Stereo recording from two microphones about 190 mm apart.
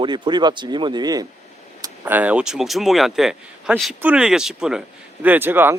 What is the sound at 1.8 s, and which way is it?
Speech, 10° right (ahead or behind).